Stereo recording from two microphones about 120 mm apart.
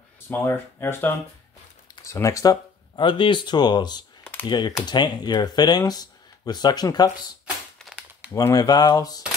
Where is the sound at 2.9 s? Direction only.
40° left (ahead or behind).